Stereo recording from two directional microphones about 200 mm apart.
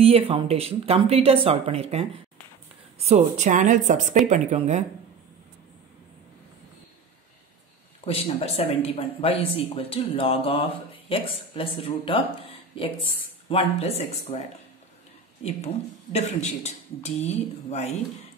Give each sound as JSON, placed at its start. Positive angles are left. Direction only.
{"t": 0.0, "sound": "speech", "side_deg": -30}
{"t": 8.0, "sound": "speech", "side_deg": 30}